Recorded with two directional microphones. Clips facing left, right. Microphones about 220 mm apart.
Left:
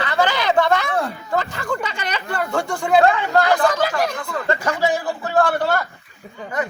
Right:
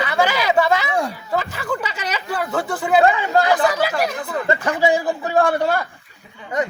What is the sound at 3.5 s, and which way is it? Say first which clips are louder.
Chatter: even; 5° right (ahead or behind).